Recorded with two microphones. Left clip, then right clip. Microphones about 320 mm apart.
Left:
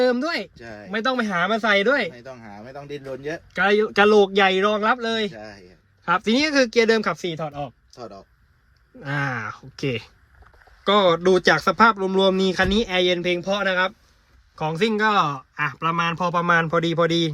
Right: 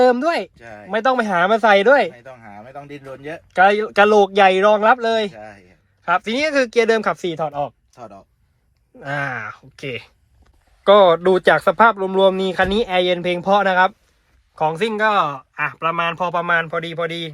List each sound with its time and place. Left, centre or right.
0.6 s speech: right
0.9 s speech: centre
2.4 s a sound: right
3.5 s speech: centre
9.0 s speech: centre